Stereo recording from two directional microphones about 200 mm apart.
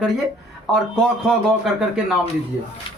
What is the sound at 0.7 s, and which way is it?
Speech, 5° left (ahead or behind).